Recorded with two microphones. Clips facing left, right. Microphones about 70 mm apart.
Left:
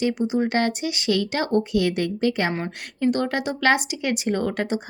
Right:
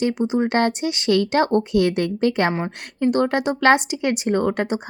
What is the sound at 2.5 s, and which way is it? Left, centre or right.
Speech, right.